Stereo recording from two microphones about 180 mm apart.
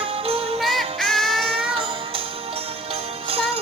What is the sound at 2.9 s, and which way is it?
Jingle bell, 35° right (ahead or behind).